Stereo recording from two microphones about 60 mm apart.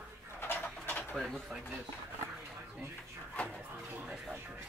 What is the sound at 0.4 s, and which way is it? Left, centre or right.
Bird, left.